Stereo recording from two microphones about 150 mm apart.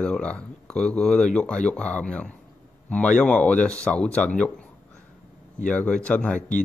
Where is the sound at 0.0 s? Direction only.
5° left (ahead or behind).